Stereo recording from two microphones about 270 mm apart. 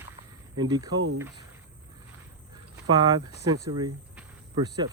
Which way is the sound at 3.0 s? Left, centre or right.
Centre.